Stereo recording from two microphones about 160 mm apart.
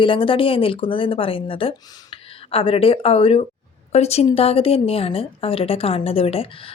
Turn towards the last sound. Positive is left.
turn(degrees=35)  # may be behind; listen again after turning